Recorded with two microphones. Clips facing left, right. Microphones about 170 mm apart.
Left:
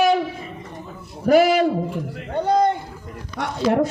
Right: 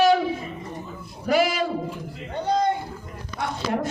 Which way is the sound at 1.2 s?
55° left (ahead or behind).